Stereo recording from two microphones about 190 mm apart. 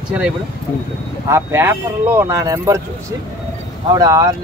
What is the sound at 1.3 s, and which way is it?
Speech, 10° right (ahead or behind).